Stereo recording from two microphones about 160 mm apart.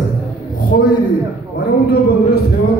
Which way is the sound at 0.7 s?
90° left.